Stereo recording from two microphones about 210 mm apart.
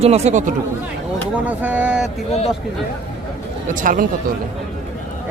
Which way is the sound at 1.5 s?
5° right (ahead or behind).